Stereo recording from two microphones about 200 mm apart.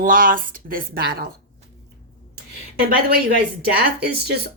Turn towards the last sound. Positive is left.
turn(degrees=-55)  # may be behind; listen again after turning